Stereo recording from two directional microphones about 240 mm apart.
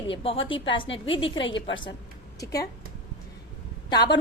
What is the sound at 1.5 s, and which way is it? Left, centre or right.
Speech, left.